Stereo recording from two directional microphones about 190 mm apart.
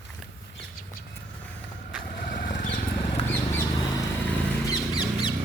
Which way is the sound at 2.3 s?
45° left (ahead or behind).